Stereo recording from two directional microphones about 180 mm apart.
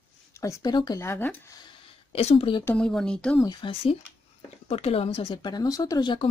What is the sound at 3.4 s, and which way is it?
Speech, 30° left (ahead or behind).